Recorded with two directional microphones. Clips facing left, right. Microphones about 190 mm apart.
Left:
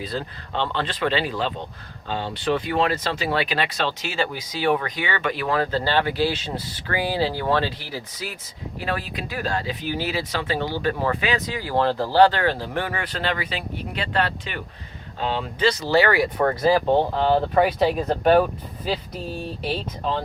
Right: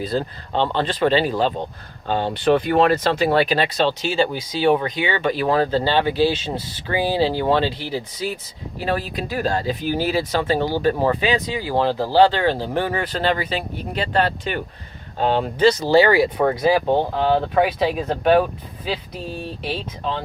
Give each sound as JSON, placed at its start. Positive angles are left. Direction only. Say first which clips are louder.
{"t": 0.0, "sound": "speech", "louder": "right 6 dB", "side_deg": -40}
{"t": 2.0, "sound": "speech", "louder": "right 6 dB", "side_deg": -55}
{"t": 11.6, "sound": "speech", "louder": "left 1 dB", "side_deg": -15}
{"t": 15.9, "sound": "speech", "louder": "right 2 dB", "side_deg": -30}
{"t": 16.4, "sound": "speech", "louder": "right 2 dB", "side_deg": -10}
{"t": 19.6, "sound": "speech", "louder": "even", "side_deg": 0}